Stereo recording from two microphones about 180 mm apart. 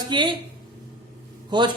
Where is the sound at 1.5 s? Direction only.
25° right (ahead or behind).